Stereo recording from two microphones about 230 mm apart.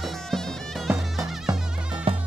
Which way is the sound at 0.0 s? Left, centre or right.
Centre.